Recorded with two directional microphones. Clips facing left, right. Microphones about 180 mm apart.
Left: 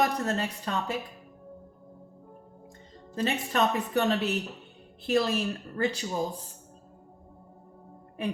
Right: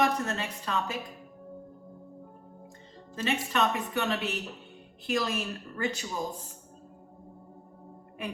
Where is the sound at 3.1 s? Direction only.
35° left (ahead or behind).